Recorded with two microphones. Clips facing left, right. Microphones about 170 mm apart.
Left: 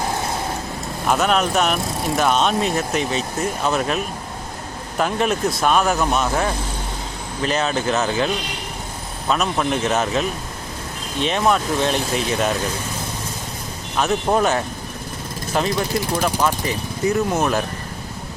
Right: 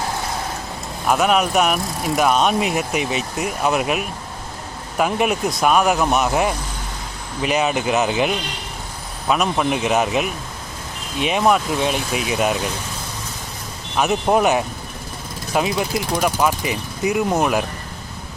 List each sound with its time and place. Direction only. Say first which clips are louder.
1.0 s speech: right 1 dB; 5° right (ahead or behind)
14.0 s speech: right 2 dB; 15° right (ahead or behind)